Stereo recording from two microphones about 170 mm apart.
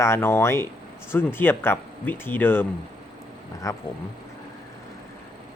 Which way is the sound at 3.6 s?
15° left (ahead or behind).